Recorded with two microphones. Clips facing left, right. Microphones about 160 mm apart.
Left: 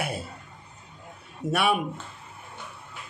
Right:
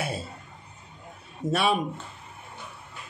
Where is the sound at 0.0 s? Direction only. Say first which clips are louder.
Even; 25° right (ahead or behind).